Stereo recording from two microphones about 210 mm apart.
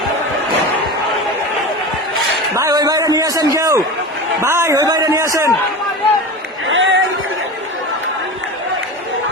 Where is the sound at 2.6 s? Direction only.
15° right (ahead or behind).